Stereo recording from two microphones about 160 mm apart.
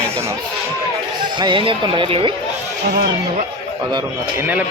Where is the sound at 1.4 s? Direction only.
30° right (ahead or behind).